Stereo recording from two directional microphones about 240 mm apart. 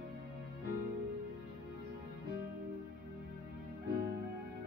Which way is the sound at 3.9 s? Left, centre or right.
Right.